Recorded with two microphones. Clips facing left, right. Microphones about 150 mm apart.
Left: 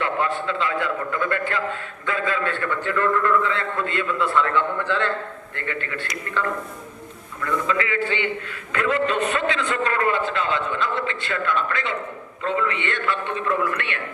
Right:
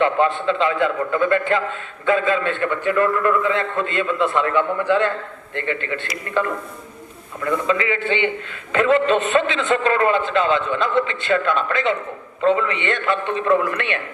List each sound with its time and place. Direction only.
0.0 s a man's voice: 20° right (ahead or behind)
7.4 s a man's voice: 20° right (ahead or behind)